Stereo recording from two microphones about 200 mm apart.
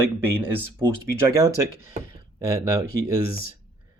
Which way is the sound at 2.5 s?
15° right (ahead or behind).